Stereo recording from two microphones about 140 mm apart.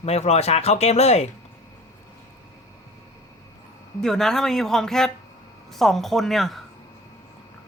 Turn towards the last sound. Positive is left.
turn(degrees=0)  # may be behind; listen again after turning